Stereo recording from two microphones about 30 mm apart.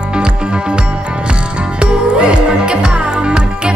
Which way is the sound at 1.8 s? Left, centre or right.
Right.